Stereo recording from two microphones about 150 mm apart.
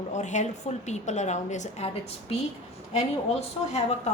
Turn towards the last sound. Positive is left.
turn(degrees=45)  # may be behind; listen again after turning